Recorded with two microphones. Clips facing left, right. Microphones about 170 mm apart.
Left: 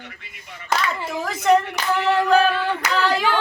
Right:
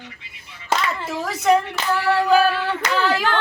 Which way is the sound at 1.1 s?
5° right (ahead or behind).